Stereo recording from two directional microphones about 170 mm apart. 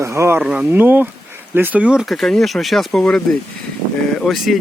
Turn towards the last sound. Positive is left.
turn(degrees=0)  # may be behind; listen again after turning